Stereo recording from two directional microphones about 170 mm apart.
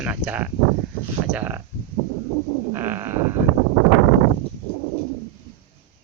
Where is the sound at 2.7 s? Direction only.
15° right (ahead or behind).